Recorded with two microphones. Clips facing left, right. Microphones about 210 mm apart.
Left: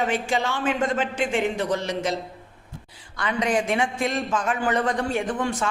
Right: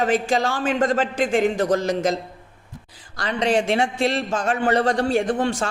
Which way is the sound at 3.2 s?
35° right (ahead or behind).